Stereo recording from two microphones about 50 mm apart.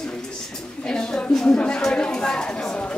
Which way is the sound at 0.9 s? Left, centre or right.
Centre.